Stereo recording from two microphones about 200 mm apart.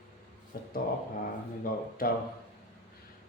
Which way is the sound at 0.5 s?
50° left (ahead or behind).